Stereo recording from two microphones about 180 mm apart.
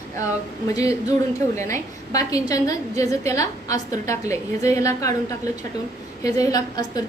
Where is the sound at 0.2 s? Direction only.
20° left (ahead or behind).